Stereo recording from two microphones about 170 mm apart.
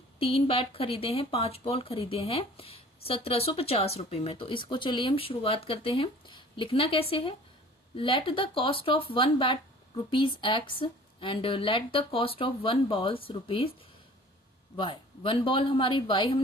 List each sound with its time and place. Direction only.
0.2 s speech: 35° left (ahead or behind)
14.8 s speech: 30° left (ahead or behind)